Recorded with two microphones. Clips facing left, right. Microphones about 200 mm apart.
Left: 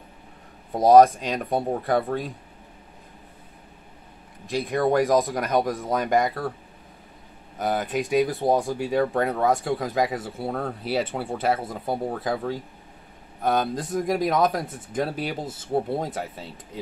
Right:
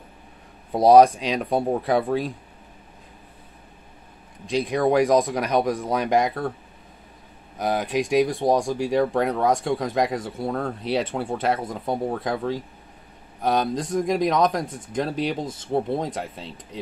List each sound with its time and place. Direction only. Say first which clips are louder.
0.7 s speech: right 1 dB; 15° right (ahead or behind)
1.3 s speech: right 3 dB; centre (ahead or behind)
4.5 s speech: right 2 dB; centre (ahead or behind)
7.5 s speech: right 2 dB; centre (ahead or behind)
13.7 s speech: right 2 dB; 5° left (ahead or behind)